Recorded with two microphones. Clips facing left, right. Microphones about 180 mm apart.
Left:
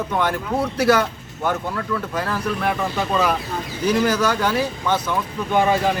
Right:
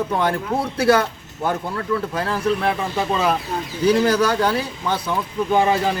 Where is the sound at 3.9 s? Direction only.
30° right (ahead or behind).